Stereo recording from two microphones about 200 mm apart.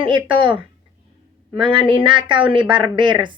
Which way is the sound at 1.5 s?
25° right (ahead or behind).